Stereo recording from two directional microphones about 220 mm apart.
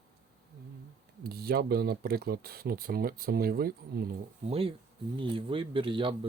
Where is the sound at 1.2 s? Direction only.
45° right (ahead or behind).